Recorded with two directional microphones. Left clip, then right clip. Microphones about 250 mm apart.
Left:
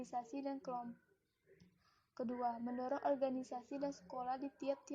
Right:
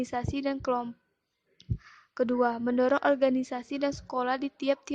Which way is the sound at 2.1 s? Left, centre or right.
Right.